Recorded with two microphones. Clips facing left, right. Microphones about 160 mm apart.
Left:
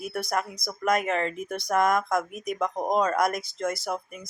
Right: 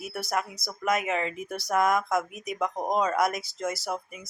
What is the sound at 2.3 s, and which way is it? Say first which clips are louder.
Speech: left 4 dB; 50° left (ahead or behind).